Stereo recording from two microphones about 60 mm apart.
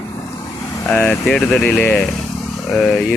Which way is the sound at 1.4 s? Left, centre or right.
Centre.